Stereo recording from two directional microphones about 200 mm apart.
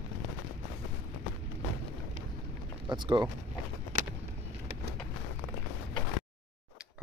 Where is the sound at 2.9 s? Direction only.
20° right (ahead or behind).